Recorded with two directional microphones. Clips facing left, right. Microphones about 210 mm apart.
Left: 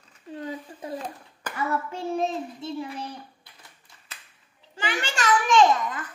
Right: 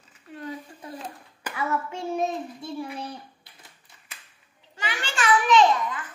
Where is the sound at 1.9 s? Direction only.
30° left (ahead or behind).